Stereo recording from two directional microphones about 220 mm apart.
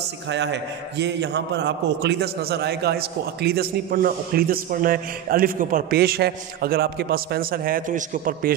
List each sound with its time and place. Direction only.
0.3 s a man's voice: 50° right (ahead or behind)